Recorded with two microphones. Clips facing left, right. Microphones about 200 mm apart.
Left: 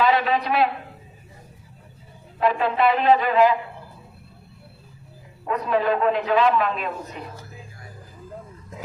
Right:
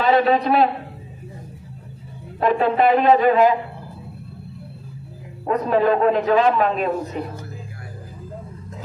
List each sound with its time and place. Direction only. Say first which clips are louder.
0.0 s a man's voice: right 4 dB; 40° right (ahead or behind)
2.4 s a sound: right 3 dB; 45° right (ahead or behind)
5.5 s a man's voice: right 4 dB; 40° right (ahead or behind)